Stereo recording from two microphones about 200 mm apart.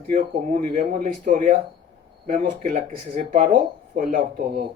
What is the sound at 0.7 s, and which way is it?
Speech, 45° right (ahead or behind).